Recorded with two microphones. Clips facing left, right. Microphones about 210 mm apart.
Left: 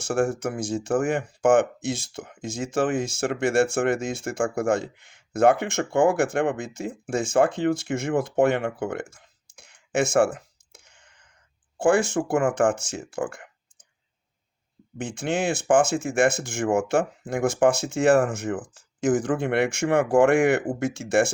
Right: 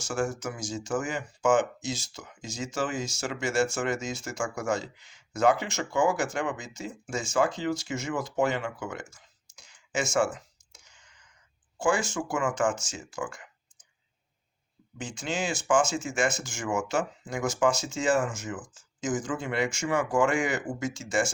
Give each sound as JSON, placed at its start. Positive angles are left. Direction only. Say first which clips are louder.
{"t": 0.0, "sound": "speech", "louder": "left 6 dB", "side_deg": 55}
{"t": 14.9, "sound": "speech", "louder": "left 6 dB", "side_deg": 60}